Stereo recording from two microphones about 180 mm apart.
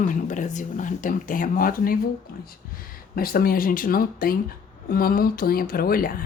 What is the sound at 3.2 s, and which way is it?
A woman's voice, 55° left (ahead or behind).